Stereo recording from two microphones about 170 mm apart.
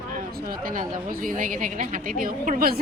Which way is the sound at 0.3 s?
55° right (ahead or behind).